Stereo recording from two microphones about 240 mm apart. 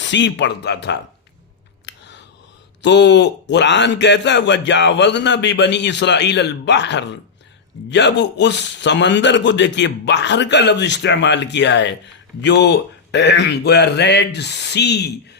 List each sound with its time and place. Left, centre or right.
0.0 s a man's voice: left
1.9 s scissors: left
2.8 s a man's voice: left